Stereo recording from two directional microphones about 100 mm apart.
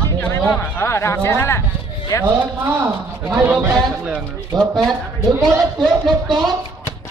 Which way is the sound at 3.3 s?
20° right (ahead or behind).